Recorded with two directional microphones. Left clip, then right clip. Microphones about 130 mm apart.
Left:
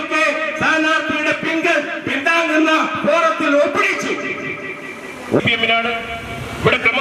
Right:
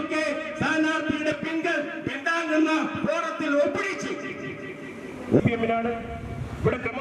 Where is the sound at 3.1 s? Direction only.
40° right (ahead or behind).